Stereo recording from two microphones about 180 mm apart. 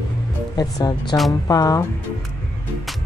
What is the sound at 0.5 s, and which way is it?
Speech, 25° left (ahead or behind).